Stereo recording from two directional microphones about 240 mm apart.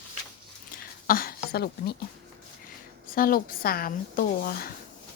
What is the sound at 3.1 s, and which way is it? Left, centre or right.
Speech, left.